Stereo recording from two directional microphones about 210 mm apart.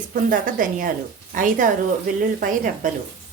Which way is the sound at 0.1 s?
40° right (ahead or behind).